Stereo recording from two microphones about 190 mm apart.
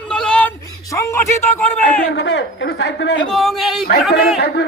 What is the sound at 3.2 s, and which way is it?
Speech, centre (ahead or behind).